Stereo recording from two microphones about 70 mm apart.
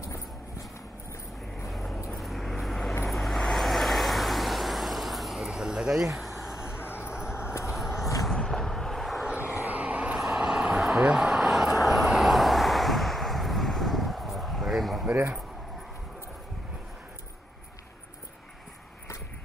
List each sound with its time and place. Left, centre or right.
0.0 s clip-clop: left
1.7 s vehicle: centre
6.8 s a sound: left
7.7 s vehicle: centre
9.4 s vehicle: right
10.3 s vehicle: centre
15.0 s a sound: right